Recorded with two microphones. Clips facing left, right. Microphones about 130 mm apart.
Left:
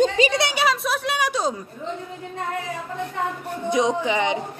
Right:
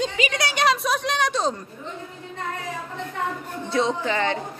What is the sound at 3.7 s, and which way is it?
Speech, 15° left (ahead or behind).